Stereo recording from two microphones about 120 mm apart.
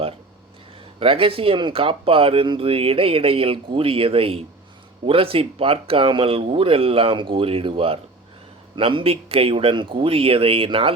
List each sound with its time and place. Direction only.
0.9 s speech: 50° right (ahead or behind)